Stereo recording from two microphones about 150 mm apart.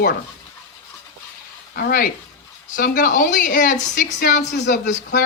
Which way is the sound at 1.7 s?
85° left.